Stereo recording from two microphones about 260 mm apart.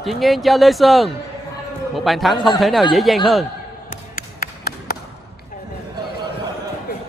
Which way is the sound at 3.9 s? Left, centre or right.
Left.